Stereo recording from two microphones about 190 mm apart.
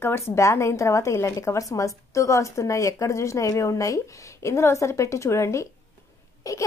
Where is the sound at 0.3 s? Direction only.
15° left (ahead or behind).